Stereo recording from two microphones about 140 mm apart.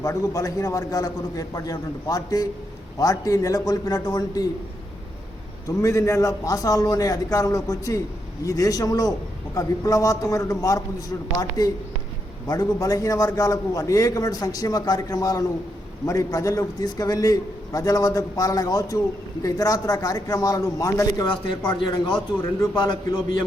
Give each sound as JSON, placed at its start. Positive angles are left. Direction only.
{"t": 0.0, "sound": "a man's voice", "side_deg": 25}
{"t": 5.6, "sound": "a man's voice", "side_deg": 25}